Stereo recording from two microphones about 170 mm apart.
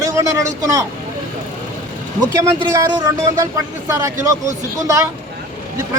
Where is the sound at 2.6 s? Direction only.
25° right (ahead or behind).